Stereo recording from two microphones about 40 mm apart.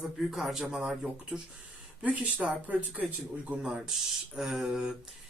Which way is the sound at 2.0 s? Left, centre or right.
Right.